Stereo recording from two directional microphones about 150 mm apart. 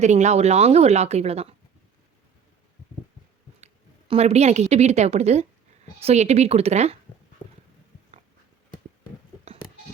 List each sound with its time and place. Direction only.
0.0 s a woman's voice: 50° right (ahead or behind)
4.1 s a woman's voice: 45° right (ahead or behind)